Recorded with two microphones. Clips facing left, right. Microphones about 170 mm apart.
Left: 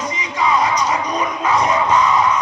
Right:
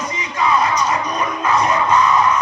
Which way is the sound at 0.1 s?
15° left (ahead or behind).